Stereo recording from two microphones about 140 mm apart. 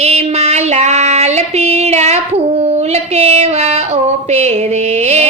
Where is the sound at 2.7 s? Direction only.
50° right (ahead or behind).